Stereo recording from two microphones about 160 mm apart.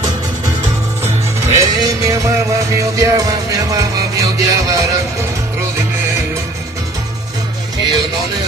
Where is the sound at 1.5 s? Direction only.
20° right (ahead or behind).